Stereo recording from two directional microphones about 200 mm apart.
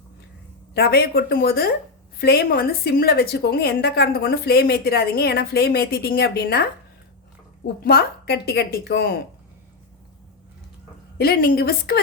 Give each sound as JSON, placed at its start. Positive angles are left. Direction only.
{"t": 0.7, "sound": "a woman's voice", "side_deg": 50}
{"t": 7.9, "sound": "a woman's voice", "side_deg": 50}
{"t": 11.2, "sound": "a woman's voice", "side_deg": 50}